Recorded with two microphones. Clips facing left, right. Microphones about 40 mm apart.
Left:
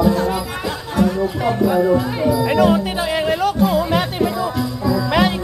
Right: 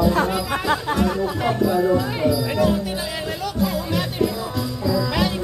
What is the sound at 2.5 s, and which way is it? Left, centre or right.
Music, left.